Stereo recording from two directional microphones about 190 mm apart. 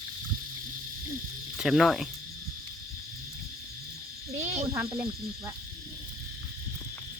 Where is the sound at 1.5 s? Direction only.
Centre (ahead or behind).